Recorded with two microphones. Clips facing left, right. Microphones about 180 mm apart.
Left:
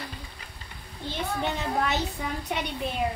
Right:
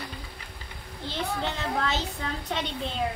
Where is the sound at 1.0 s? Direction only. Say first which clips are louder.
Left 1 dB; 15° left (ahead or behind).